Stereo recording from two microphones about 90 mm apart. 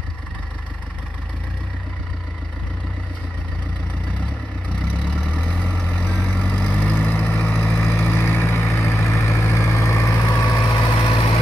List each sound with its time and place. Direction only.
4.7 s vehicle: 15° left (ahead or behind); by 10.8 s 40° left (ahead or behind)
10.8 s vehicle: 60° left (ahead or behind)